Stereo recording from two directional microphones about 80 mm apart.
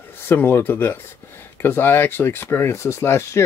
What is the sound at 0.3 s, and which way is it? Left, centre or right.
Speech, left.